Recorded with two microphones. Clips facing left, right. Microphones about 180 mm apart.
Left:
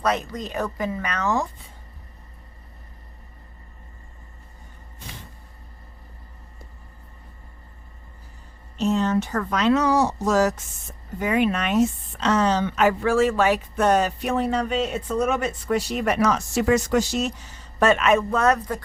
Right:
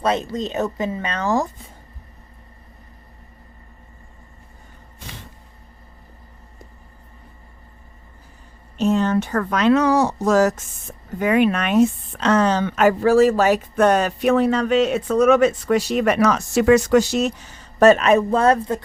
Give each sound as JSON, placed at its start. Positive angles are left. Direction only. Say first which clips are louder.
{"t": 0.0, "sound": "speech", "louder": "right 3 dB", "side_deg": -25}
{"t": 8.8, "sound": "a woman's voice", "louder": "right 3 dB", "side_deg": -55}
{"t": 11.2, "sound": "a woman's voice", "louder": "right 4 dB", "side_deg": -65}
{"t": 13.7, "sound": "speech", "louder": "right 2 dB", "side_deg": -65}
{"t": 17.7, "sound": "a man's voice", "louder": "right 5 dB", "side_deg": -40}